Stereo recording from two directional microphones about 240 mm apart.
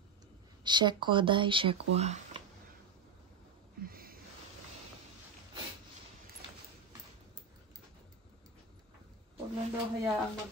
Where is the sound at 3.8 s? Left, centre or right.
Right.